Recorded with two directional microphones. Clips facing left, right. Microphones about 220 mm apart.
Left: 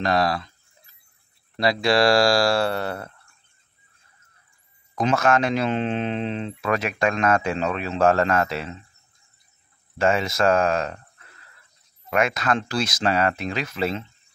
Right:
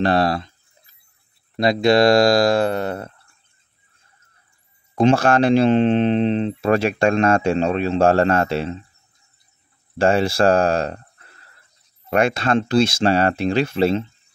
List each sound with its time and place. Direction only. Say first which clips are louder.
0.0 s speech: right 4 dB; 30° right (ahead or behind)
1.6 s speech: right 5 dB; 20° right (ahead or behind)
4.9 s speech: right 5 dB; 30° right (ahead or behind)
9.9 s speech: right 5 dB; 30° right (ahead or behind)